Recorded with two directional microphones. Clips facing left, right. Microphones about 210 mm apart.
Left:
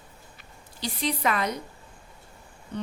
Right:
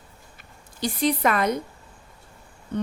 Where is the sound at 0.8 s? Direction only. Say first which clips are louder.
Right 5 dB; 50° right (ahead or behind).